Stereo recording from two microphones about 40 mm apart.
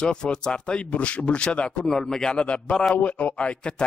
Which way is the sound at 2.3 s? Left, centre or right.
Left.